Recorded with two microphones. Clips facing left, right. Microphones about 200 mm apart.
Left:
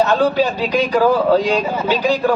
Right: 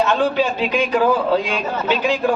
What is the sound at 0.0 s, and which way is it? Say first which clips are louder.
A man's voice: left 3 dB; 40° left (ahead or behind).